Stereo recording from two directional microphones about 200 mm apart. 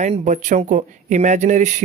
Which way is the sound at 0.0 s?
40° right (ahead or behind).